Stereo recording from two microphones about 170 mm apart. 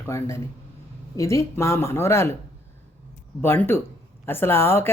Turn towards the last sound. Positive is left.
turn(degrees=15)  # may be behind; listen again after turning